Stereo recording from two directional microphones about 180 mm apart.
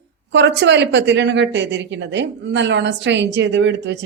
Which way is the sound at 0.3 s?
80° right.